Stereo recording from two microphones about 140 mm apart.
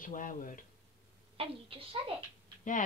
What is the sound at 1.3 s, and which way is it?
Speech, 40° right (ahead or behind).